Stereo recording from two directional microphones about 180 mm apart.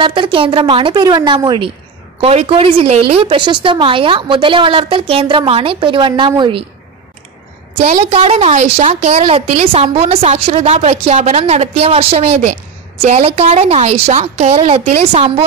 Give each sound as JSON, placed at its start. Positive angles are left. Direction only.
{"t": 0.0, "sound": "a woman's voice", "side_deg": -30}
{"t": 7.7, "sound": "a woman's voice", "side_deg": -35}